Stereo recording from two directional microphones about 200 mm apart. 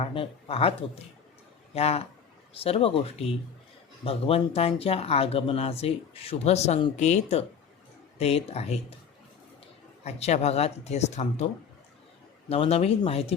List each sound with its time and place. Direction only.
0.0 s speech: 30° left (ahead or behind)
10.0 s speech: 35° left (ahead or behind)
12.5 s speech: 30° left (ahead or behind)